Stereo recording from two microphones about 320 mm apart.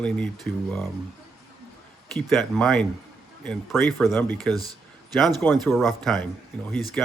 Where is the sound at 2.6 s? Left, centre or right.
Centre.